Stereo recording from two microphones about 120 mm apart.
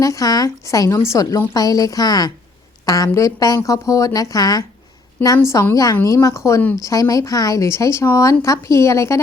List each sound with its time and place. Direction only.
0.0 s a woman's voice: 30° left (ahead or behind)